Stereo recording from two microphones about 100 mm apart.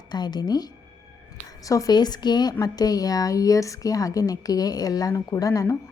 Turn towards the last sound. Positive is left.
turn(degrees=35)  # may be behind; listen again after turning